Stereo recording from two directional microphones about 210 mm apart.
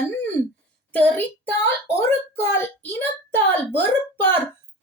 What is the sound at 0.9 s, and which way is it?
Child singing, 5° left (ahead or behind).